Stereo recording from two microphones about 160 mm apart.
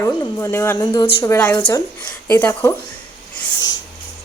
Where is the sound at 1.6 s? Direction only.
30° left (ahead or behind).